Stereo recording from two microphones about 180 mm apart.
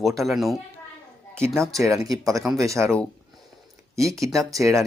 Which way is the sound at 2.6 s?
15° right (ahead or behind).